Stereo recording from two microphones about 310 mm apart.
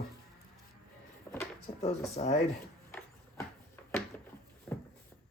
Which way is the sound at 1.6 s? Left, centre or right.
Left.